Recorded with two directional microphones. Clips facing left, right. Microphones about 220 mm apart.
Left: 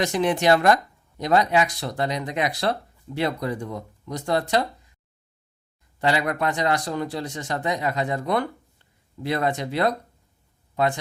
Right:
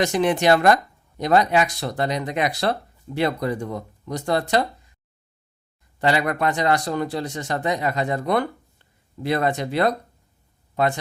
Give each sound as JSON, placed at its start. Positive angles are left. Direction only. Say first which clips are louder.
{"t": 0.0, "sound": "speech", "louder": "right 2 dB", "side_deg": -70}
{"t": 6.0, "sound": "speech", "louder": "right 2 dB", "side_deg": -55}
{"t": 7.4, "sound": "speech", "louder": "right 1 dB", "side_deg": -55}